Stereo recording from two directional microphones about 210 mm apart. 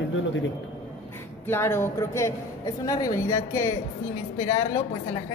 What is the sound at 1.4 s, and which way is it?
A woman's voice, 10° left (ahead or behind).